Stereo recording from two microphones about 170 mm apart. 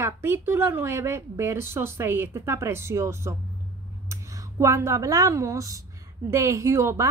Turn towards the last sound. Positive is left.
turn(degrees=-15)  # may be behind; listen again after turning